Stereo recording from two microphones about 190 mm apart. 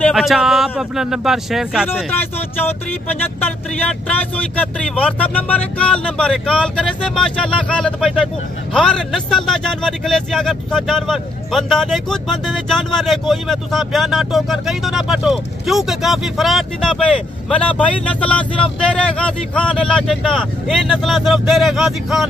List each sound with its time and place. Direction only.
0.0 s speech: centre (ahead or behind)
2.1 s speech: 10° left (ahead or behind)